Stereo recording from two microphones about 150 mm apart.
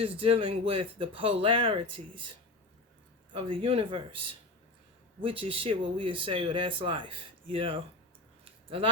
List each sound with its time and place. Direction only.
0.0 s speech: 40° right (ahead or behind)
3.3 s speech: 35° right (ahead or behind)
5.2 s speech: 40° right (ahead or behind)